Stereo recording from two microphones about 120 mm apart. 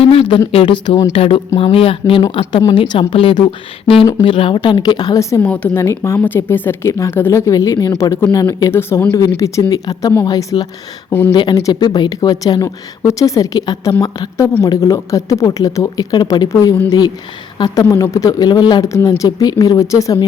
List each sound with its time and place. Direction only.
0.0 s speech: 55° left (ahead or behind); by 5.5 s 25° left (ahead or behind)
5.5 s speech: 10° left (ahead or behind)
5.8 s speech: 20° left (ahead or behind)
9.4 s speech: 30° left (ahead or behind)
17.8 s speech: 25° left (ahead or behind)